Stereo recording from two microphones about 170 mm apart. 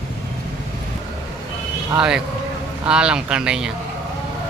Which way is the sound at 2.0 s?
5° right (ahead or behind).